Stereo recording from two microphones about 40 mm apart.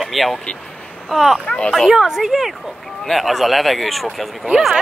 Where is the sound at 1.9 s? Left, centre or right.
Centre.